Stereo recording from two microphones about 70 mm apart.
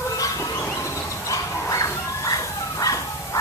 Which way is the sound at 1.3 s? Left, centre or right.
Left.